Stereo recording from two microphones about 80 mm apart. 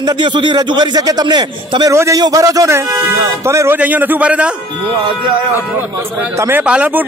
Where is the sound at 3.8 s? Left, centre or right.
Right.